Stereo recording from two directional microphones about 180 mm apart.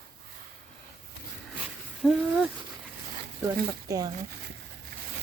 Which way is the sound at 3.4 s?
20° right (ahead or behind).